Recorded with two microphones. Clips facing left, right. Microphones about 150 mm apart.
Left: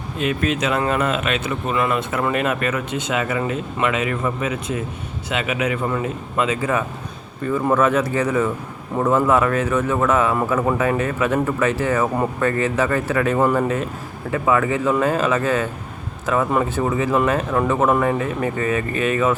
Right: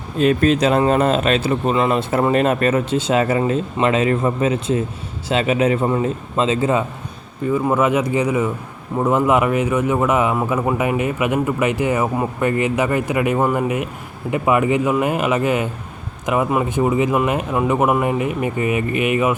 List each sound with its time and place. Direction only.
0.2 s a man's voice: 35° right (ahead or behind)
7.6 s a man's voice: 15° right (ahead or behind)